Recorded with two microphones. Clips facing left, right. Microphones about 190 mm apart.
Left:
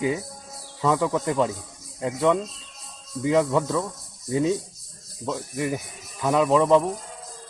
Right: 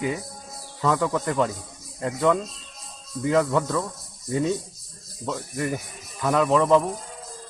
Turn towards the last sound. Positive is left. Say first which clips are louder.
# left 1 dB
turn(degrees=5)  # may be behind; listen again after turning